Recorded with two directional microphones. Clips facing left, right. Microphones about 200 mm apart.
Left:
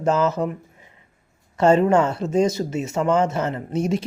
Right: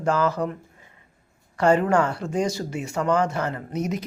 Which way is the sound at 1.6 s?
25° left (ahead or behind).